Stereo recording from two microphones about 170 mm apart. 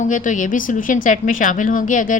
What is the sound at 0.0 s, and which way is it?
Speech, 50° left (ahead or behind).